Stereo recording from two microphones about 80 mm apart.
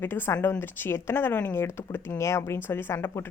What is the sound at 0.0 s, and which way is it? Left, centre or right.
A woman's voice, left.